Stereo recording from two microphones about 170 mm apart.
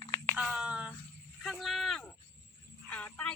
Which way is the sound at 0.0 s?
20° left (ahead or behind).